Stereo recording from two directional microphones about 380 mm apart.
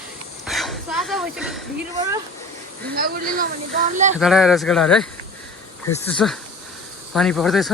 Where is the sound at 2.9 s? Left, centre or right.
Right.